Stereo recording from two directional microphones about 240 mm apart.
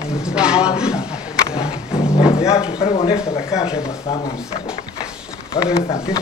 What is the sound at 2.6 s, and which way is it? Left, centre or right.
Speech, left.